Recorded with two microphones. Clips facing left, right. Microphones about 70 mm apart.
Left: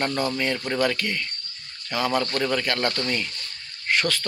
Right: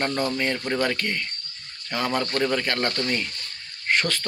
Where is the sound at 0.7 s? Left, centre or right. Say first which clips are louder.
Left 1 dB; right.